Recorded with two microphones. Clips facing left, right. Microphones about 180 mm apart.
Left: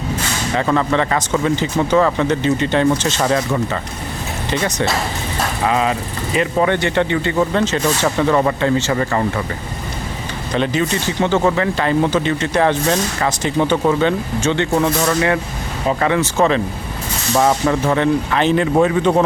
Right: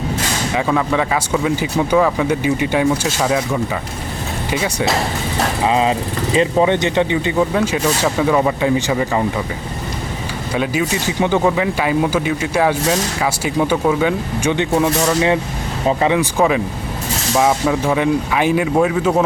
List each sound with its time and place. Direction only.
0.5 s speech: 5° right (ahead or behind)
5.6 s speech: 25° right (ahead or behind)
10.5 s speech: 10° right (ahead or behind)